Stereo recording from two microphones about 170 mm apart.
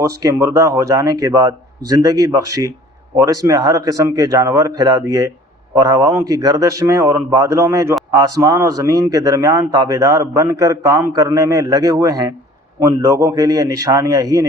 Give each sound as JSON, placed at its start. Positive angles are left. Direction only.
{"t": 0.0, "sound": "a man's voice", "side_deg": -20}